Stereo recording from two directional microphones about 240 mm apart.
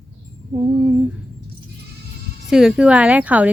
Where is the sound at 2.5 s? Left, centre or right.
Centre.